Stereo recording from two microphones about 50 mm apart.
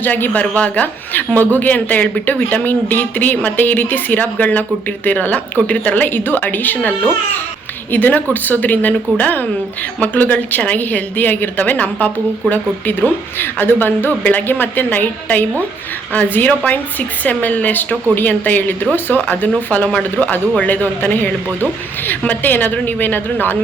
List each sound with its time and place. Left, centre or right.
0.0 s a woman's voice: left
6.1 s a woman's voice: left